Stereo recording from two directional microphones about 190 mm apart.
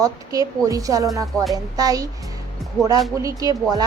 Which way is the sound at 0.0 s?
20° right (ahead or behind).